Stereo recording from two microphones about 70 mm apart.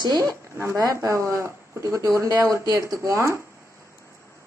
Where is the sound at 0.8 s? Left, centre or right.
Right.